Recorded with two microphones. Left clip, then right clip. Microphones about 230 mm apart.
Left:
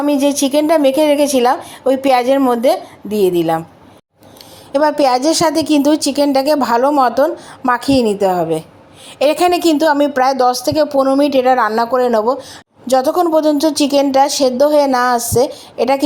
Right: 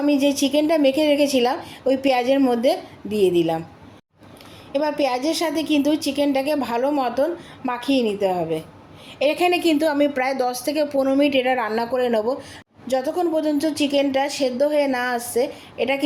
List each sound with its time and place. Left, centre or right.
0.0 s a woman's voice: centre
4.7 s a woman's voice: left